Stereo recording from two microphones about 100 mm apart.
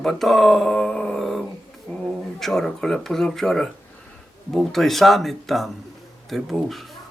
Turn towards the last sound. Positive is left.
turn(degrees=0)  # may be behind; listen again after turning